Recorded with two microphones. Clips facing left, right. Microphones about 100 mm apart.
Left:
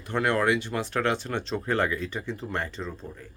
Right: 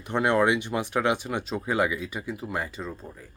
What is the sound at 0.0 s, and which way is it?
Speech, 20° right (ahead or behind).